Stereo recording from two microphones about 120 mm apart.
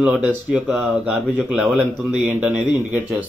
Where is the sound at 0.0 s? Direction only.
15° right (ahead or behind).